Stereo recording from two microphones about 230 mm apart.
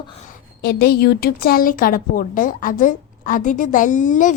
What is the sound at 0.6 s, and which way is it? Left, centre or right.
A woman's voice, left.